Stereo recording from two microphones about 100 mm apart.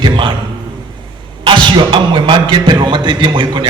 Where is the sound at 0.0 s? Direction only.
55° right (ahead or behind).